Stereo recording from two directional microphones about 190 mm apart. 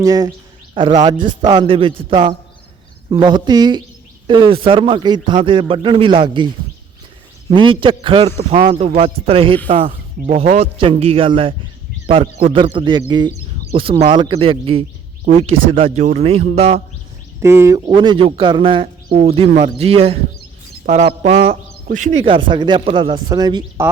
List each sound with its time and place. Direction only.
0.0 s speech: 20° right (ahead or behind)
7.5 s a man's voice: 25° right (ahead or behind)
17.4 s speech: 15° right (ahead or behind); by 21.5 s 35° right (ahead or behind)
21.5 s speech: 45° right (ahead or behind)
22.3 s speech: 25° right (ahead or behind)